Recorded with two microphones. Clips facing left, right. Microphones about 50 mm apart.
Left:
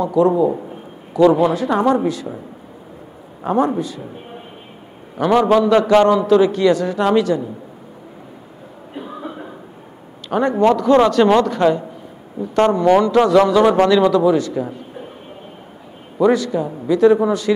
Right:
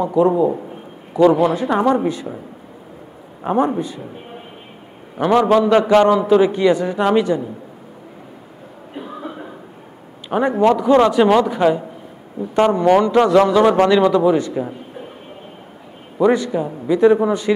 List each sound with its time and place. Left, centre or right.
0.0 s a man's voice: right
3.4 s a man's voice: centre
5.2 s a man's voice: right
8.9 s a sound: centre
10.3 s a man's voice: centre
16.2 s a man's voice: right